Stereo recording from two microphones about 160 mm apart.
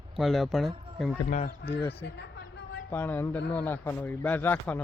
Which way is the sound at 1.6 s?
90° left.